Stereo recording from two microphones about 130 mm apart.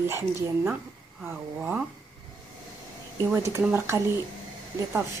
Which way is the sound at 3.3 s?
20° right (ahead or behind).